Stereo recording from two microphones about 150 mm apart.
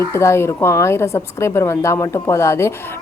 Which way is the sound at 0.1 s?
20° left (ahead or behind).